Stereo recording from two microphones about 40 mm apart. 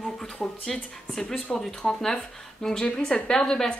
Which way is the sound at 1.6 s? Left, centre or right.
Centre.